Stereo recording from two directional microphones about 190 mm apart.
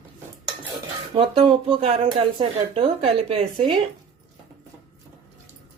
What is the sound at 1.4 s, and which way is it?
Speech, 30° right (ahead or behind).